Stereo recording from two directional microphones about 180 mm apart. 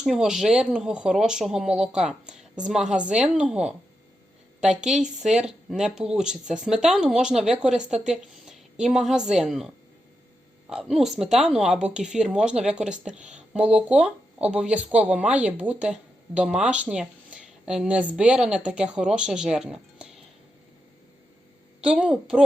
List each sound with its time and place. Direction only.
0.0 s a woman's voice: 5° right (ahead or behind)
21.8 s speech: 5° right (ahead or behind)